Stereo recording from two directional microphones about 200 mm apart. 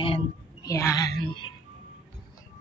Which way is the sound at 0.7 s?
15° left (ahead or behind).